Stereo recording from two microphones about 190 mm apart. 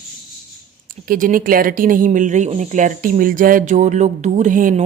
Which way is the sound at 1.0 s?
45° right (ahead or behind).